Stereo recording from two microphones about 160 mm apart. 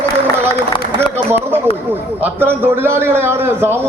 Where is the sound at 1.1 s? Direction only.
15° right (ahead or behind).